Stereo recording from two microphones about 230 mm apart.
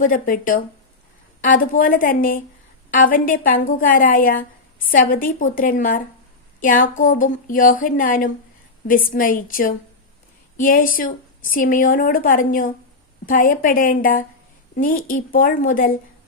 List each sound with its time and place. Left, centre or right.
0.0 s a woman's voice: left